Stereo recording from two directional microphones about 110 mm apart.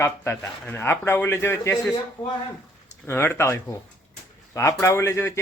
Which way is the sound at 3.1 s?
20° left (ahead or behind).